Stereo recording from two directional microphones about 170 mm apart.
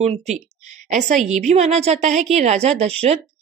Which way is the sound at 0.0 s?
40° right (ahead or behind).